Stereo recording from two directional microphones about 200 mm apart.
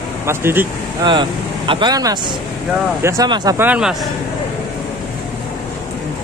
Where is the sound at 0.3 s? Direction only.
10° right (ahead or behind).